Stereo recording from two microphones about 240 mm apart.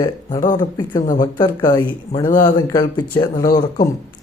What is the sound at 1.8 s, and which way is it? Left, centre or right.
Speech, left.